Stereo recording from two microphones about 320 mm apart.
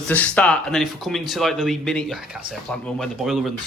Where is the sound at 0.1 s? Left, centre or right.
Centre.